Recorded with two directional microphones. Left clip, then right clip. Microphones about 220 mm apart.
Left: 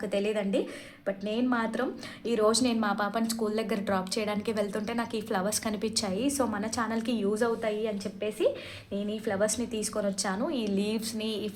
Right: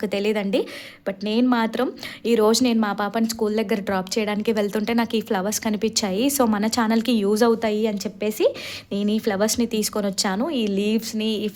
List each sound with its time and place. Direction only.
0.0 s a woman's voice: 40° right (ahead or behind)